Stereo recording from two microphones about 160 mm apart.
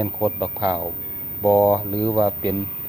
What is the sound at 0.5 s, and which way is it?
Speech, 25° right (ahead or behind).